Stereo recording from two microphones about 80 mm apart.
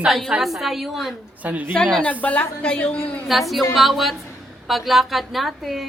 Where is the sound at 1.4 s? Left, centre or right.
Centre.